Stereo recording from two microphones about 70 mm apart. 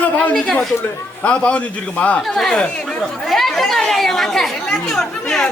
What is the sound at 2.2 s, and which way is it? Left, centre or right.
A man's voice, centre.